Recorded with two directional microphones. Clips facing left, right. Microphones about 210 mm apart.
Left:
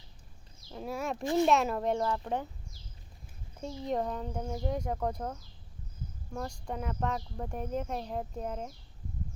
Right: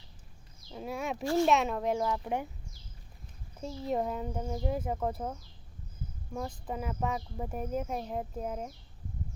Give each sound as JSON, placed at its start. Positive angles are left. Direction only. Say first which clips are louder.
{"t": 0.7, "sound": "speech", "louder": "even", "side_deg": 0}
{"t": 1.2, "sound": "speech", "louder": "even", "side_deg": 20}
{"t": 1.5, "sound": "speech", "louder": "even", "side_deg": 0}
{"t": 3.6, "sound": "speech", "louder": "right 1 dB", "side_deg": -5}